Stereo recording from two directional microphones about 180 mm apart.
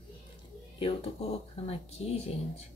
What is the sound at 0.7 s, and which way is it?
Speech, 30° left (ahead or behind).